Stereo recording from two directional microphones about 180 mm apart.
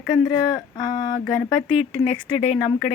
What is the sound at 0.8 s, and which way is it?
Speech, 20° left (ahead or behind).